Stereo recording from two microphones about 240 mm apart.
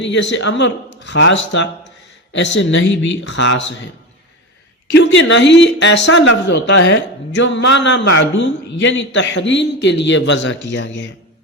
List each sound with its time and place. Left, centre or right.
0.0 s speech: left
4.9 s speech: left